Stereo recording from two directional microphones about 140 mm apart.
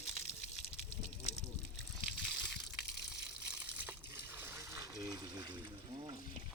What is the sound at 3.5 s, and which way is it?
Water, 10° right (ahead or behind).